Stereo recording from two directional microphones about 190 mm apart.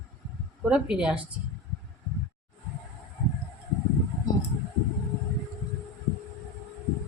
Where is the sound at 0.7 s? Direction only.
5° right (ahead or behind).